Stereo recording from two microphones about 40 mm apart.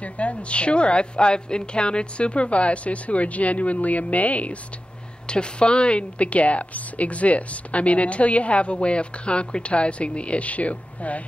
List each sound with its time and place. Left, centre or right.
0.0 s a woman's voice: left
5.2 s a woman's voice: left